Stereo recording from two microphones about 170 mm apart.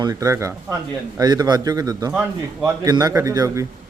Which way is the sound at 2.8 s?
20° right (ahead or behind).